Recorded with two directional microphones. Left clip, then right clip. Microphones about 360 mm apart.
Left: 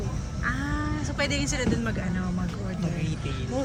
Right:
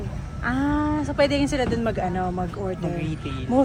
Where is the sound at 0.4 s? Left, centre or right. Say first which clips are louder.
Right 6 dB; centre.